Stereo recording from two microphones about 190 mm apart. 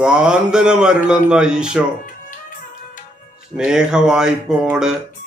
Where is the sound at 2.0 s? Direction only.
45° left (ahead or behind).